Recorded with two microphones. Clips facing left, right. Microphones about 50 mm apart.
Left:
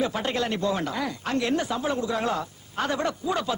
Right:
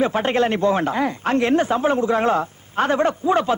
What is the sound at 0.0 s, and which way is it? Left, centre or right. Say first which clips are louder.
Speech: right 8 dB; right.